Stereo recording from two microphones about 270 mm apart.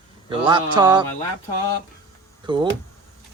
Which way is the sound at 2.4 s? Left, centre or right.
Centre.